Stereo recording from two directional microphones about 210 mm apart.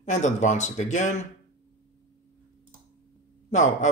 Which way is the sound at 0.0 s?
35° left (ahead or behind).